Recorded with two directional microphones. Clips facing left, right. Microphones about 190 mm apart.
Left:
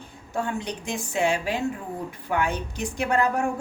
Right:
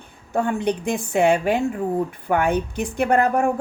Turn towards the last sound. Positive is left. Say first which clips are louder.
# right 5 dB
turn(degrees=-55)  # may be behind; listen again after turning